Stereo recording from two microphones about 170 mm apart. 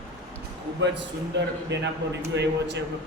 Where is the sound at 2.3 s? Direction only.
90° right.